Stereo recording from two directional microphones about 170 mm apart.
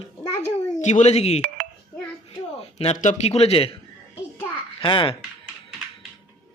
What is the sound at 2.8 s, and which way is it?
Speech, 45° left (ahead or behind).